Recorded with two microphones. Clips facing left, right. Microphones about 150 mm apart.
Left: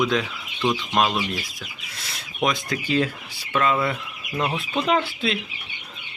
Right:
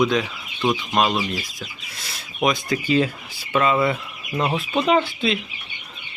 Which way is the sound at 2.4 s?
Centre (ahead or behind).